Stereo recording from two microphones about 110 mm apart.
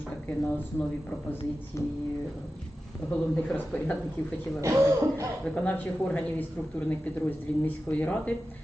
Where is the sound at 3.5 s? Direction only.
10° left (ahead or behind).